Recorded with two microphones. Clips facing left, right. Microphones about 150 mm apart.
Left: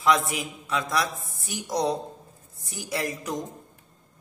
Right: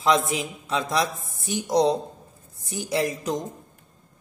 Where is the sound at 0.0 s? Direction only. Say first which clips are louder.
Right 2 dB; 25° right (ahead or behind).